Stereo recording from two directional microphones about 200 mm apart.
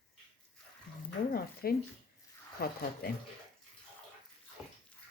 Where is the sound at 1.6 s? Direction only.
50° left (ahead or behind).